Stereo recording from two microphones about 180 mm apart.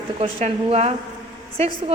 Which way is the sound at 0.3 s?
40° right (ahead or behind).